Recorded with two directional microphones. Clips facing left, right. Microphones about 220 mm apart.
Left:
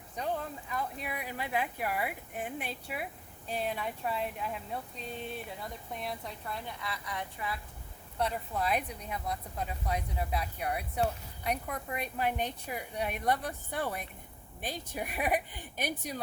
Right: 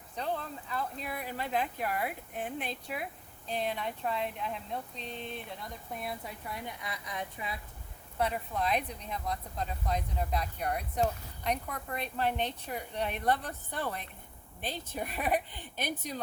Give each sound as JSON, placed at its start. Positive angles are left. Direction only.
{"t": 0.7, "sound": "speech", "side_deg": 10}
{"t": 5.9, "sound": "speech", "side_deg": -5}
{"t": 8.2, "sound": "speech", "side_deg": 5}